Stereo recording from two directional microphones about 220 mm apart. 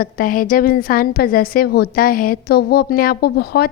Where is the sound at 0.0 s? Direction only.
40° left (ahead or behind).